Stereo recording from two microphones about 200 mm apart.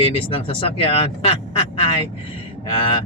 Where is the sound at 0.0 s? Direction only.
30° left (ahead or behind).